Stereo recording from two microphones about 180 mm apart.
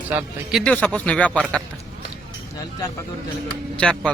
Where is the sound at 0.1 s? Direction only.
10° right (ahead or behind).